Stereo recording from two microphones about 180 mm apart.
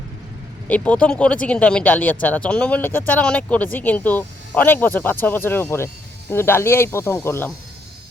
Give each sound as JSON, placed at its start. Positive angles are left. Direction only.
{"t": 0.7, "sound": "speech", "side_deg": 5}